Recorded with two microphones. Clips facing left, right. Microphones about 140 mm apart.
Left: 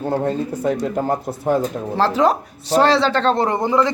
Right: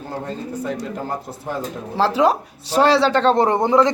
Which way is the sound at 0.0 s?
55° left (ahead or behind).